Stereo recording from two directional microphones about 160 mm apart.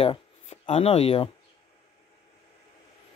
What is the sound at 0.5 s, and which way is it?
Speech, 45° left (ahead or behind).